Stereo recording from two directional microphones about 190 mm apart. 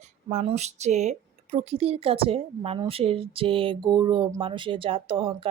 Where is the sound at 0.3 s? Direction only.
35° right (ahead or behind).